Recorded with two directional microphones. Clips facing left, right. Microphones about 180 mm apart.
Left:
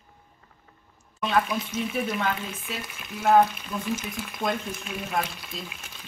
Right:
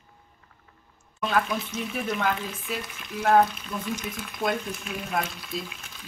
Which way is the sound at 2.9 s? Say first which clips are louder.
Left 1 dB; 5° left (ahead or behind).